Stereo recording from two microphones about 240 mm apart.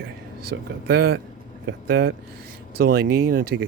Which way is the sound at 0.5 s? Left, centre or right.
Right.